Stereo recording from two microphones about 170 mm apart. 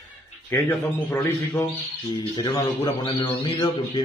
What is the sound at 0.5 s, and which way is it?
A man's voice, 15° left (ahead or behind).